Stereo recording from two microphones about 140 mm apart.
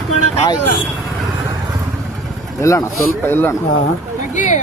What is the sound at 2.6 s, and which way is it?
Speech, 25° left (ahead or behind).